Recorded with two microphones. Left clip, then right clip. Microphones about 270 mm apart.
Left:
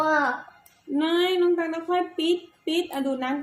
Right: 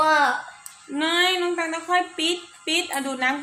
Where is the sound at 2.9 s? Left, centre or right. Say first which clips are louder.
Right 1 dB; centre.